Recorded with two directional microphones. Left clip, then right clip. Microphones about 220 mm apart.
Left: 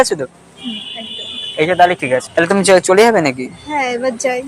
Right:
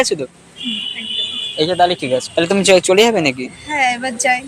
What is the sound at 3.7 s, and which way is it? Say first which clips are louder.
Speech: even; 45° right (ahead or behind).